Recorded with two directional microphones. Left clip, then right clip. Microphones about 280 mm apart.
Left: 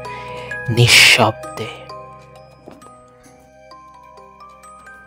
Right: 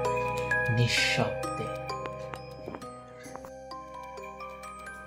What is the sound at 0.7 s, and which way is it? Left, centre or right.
Speech, left.